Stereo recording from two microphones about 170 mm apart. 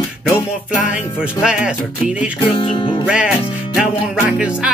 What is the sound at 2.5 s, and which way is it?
Music, 30° left (ahead or behind).